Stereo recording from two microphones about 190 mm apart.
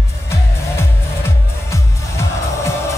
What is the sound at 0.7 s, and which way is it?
Music, 15° left (ahead or behind).